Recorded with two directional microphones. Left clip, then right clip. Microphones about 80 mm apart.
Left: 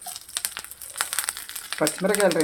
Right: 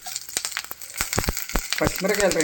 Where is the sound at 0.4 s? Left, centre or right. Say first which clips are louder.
Right 4 dB; left.